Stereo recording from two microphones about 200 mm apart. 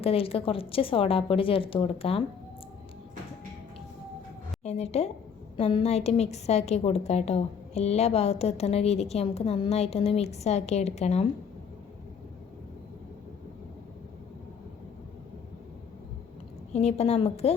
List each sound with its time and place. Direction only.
0.0 s a woman's voice: 30° left (ahead or behind)
4.6 s a woman's voice: 35° left (ahead or behind)
16.7 s a woman's voice: 30° left (ahead or behind)